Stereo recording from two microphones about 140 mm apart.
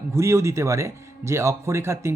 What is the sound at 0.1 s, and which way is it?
Speech, 20° right (ahead or behind).